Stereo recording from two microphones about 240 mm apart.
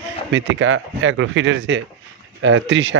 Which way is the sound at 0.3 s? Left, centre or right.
Right.